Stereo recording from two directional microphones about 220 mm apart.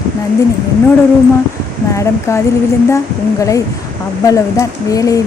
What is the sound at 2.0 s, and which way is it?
Speech, 15° left (ahead or behind).